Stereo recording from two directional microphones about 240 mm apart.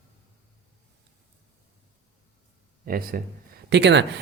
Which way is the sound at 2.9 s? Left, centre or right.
Right.